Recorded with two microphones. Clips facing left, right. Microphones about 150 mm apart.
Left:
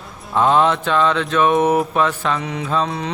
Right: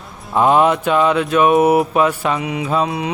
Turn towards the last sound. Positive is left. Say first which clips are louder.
# right 3 dB
turn(degrees=-10)  # may be behind; listen again after turning